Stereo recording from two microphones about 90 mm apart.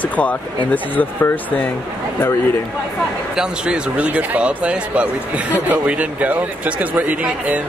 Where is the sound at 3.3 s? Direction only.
10° right (ahead or behind).